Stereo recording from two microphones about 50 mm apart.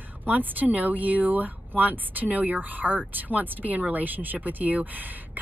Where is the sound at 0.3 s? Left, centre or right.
Right.